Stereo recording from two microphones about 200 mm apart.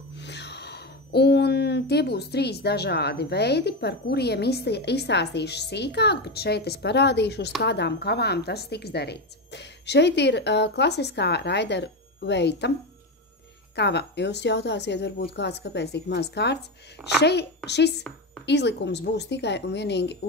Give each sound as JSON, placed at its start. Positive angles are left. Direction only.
{"t": 0.1, "sound": "a woman's voice", "side_deg": 60}
{"t": 13.7, "sound": "a woman's voice", "side_deg": 60}